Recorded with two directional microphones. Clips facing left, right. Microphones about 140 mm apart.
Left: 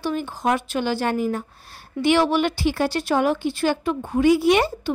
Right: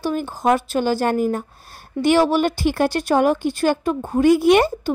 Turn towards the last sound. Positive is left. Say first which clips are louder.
# right 4 dB
turn(degrees=-50)  # may be behind; listen again after turning